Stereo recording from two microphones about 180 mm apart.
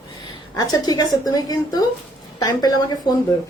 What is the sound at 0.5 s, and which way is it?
Speech, 20° left (ahead or behind).